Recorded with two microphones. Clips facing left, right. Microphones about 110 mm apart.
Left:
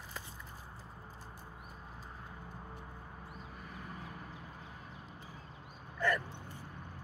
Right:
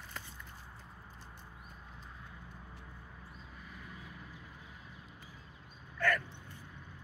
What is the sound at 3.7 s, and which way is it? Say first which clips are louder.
Vehicle: left 4 dB; 45° left (ahead or behind).